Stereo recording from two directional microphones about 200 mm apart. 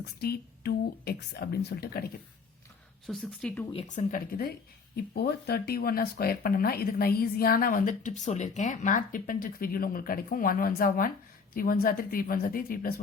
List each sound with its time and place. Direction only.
0.0 s speech: 55° left (ahead or behind)
3.1 s speech: 5° left (ahead or behind)
3.7 s speech: 35° left (ahead or behind)